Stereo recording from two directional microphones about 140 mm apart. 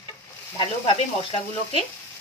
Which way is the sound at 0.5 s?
40° left (ahead or behind).